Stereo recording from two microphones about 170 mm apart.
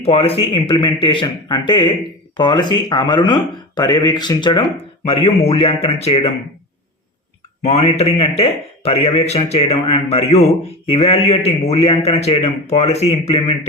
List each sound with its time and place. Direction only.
0.0 s speech: 35° left (ahead or behind)
7.6 s speech: 35° left (ahead or behind)